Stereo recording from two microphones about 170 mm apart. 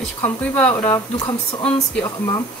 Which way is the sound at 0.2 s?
10° left (ahead or behind).